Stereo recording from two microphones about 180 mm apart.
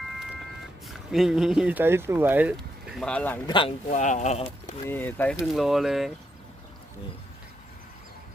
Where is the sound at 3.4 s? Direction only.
25° left (ahead or behind).